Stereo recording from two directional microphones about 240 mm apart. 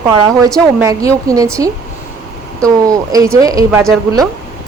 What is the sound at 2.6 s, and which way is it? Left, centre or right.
A woman's voice, centre.